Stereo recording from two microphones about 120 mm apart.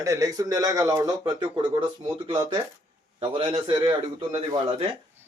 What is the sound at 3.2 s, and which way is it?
A man's voice, 45° right (ahead or behind).